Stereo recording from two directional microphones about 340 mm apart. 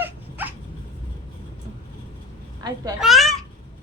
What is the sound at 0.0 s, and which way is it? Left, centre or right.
Dog, centre.